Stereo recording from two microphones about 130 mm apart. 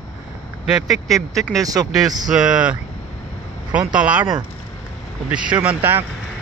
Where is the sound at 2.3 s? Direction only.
5° right (ahead or behind).